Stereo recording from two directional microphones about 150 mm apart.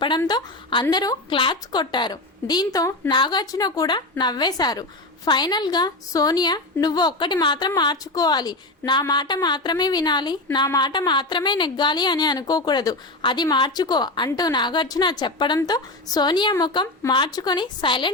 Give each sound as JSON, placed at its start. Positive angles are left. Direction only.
{"t": 0.3, "sound": "a woman's voice", "side_deg": 30}